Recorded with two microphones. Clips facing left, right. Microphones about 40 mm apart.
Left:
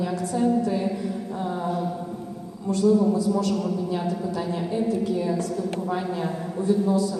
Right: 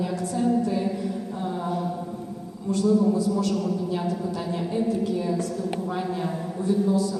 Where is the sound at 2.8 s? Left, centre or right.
Centre.